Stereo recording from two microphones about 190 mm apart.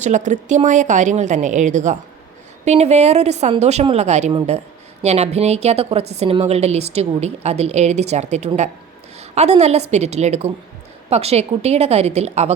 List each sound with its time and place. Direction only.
0.0 s a woman's voice: 40° right (ahead or behind)